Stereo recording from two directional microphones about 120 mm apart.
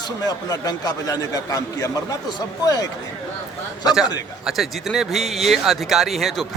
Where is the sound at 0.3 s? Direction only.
30° left (ahead or behind).